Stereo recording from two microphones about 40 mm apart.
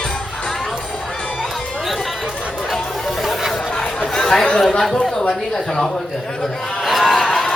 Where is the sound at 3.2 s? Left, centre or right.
Centre.